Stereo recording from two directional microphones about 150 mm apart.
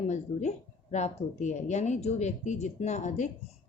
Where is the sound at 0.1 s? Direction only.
50° left (ahead or behind).